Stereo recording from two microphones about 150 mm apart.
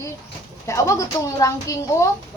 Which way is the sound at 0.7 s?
20° left (ahead or behind).